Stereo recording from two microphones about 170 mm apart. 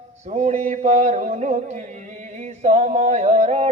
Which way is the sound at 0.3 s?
45° right (ahead or behind).